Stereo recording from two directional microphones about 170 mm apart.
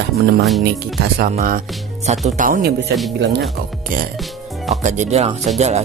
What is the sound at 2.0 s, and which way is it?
Speech, 45° right (ahead or behind).